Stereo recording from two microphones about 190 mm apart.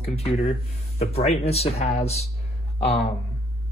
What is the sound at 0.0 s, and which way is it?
Speech, 35° left (ahead or behind).